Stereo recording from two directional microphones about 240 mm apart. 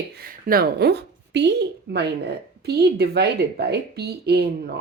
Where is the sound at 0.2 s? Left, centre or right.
Right.